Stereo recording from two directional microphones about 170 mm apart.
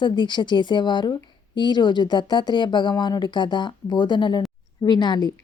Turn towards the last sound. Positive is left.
turn(degrees=25)  # may be behind; listen again after turning